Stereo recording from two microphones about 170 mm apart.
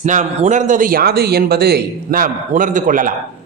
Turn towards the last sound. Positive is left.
turn(degrees=-50)  # may be behind; listen again after turning